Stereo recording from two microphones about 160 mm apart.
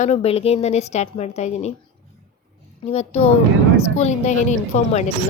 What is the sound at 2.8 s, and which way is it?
A woman's voice, 40° left (ahead or behind).